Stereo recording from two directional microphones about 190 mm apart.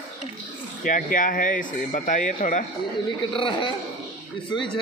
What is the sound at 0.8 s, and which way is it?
Speech, 45° left (ahead or behind).